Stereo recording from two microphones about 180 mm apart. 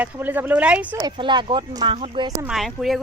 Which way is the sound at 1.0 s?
25° right (ahead or behind).